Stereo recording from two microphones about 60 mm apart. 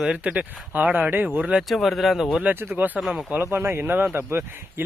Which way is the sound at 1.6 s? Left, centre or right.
Centre.